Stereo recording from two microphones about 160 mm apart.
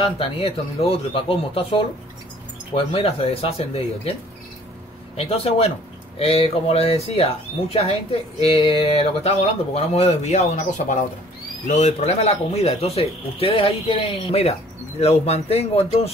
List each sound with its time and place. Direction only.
0.0 s speech: 35° left (ahead or behind)
5.1 s speech: 40° left (ahead or behind)